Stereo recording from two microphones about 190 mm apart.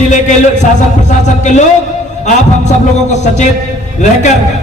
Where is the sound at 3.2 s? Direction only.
40° left (ahead or behind).